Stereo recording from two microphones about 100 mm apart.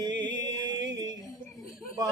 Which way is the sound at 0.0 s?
50° right (ahead or behind).